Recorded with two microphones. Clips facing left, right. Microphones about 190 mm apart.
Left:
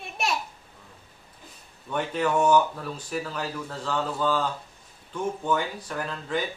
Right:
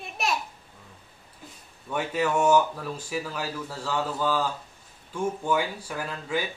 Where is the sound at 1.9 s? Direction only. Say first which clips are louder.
Left 1 dB; 5° right (ahead or behind).